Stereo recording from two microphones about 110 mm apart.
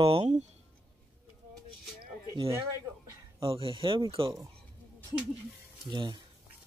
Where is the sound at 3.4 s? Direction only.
55° right (ahead or behind).